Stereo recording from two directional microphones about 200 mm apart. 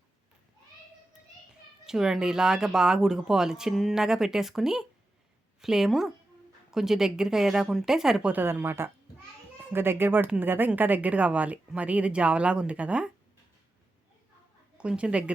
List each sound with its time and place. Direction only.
1.9 s speech: 5° right (ahead or behind)
14.8 s a woman's voice: 5° right (ahead or behind)